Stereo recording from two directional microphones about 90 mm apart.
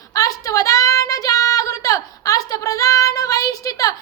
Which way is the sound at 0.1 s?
40° left (ahead or behind).